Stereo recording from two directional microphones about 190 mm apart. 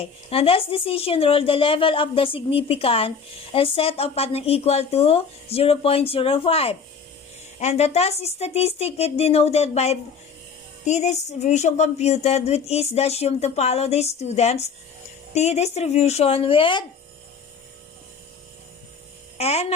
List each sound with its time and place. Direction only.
0.0 s speech: 30° left (ahead or behind)
19.4 s speech: 35° left (ahead or behind)